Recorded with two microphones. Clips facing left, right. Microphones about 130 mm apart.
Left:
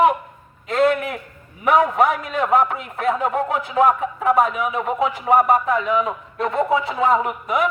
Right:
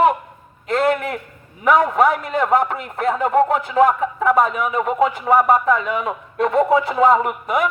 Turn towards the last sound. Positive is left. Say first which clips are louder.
# right 1 dB
turn(degrees=-55)  # may be behind; listen again after turning